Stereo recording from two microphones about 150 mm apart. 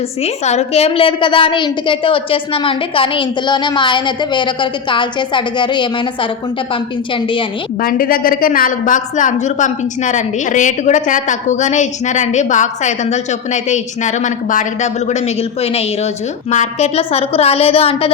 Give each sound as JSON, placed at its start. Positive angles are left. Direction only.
{"t": 0.2, "sound": "a woman's voice", "side_deg": 45}
{"t": 7.1, "sound": "a woman's voice", "side_deg": 35}
{"t": 7.8, "sound": "a woman's voice", "side_deg": 75}